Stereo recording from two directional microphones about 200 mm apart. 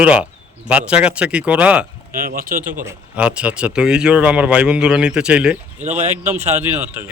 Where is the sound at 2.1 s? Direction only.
45° right (ahead or behind).